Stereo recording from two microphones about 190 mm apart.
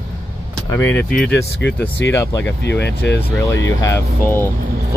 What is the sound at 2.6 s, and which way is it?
Speech, 65° left (ahead or behind).